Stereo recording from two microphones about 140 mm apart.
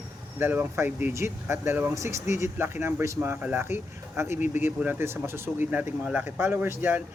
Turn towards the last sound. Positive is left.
turn(degrees=-15)  # may be behind; listen again after turning